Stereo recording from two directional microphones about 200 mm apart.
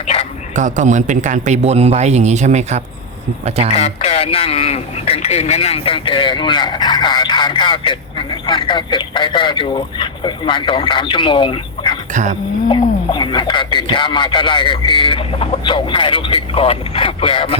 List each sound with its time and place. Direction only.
0.5 s a man's voice: 40° right (ahead or behind)
3.8 s speech: 30° left (ahead or behind)
12.1 s a man's voice: 35° right (ahead or behind)
13.1 s speech: 25° left (ahead or behind)